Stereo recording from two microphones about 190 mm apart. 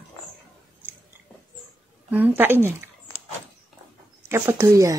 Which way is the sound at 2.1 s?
10° right (ahead or behind).